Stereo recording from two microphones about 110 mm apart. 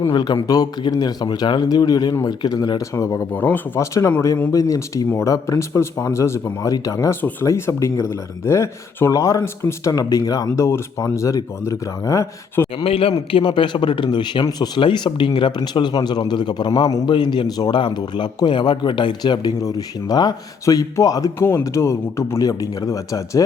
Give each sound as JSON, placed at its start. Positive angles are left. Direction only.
{"t": 0.1, "sound": "a man's voice", "side_deg": 45}
{"t": 3.3, "sound": "speech", "side_deg": 15}
{"t": 12.8, "sound": "a man's voice", "side_deg": 60}